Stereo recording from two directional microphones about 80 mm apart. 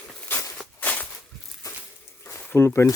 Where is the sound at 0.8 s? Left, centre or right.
Centre.